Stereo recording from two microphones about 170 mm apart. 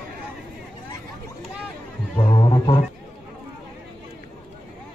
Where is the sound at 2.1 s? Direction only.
25° left (ahead or behind).